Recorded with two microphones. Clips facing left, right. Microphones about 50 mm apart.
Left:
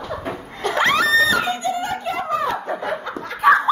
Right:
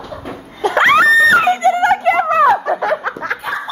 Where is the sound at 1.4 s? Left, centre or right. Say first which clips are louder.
Right 10 dB; right.